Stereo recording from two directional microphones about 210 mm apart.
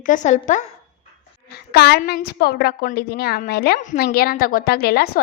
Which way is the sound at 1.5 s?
50° left (ahead or behind).